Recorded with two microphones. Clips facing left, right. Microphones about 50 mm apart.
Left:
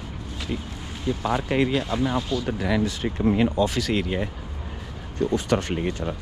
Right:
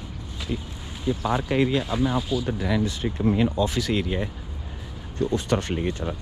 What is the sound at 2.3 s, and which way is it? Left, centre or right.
Speech, centre.